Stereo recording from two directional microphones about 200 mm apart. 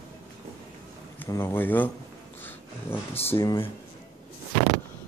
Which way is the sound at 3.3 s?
20° left (ahead or behind).